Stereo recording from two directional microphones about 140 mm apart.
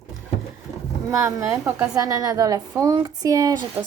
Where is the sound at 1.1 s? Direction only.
20° right (ahead or behind).